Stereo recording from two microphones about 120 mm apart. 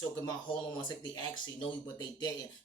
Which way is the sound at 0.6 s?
40° left (ahead or behind).